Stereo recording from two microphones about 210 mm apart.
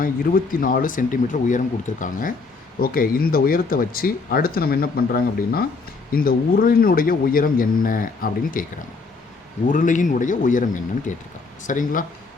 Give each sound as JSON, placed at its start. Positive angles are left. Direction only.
{"t": 0.5, "sound": "speech", "side_deg": 40}
{"t": 9.6, "sound": "speech", "side_deg": 35}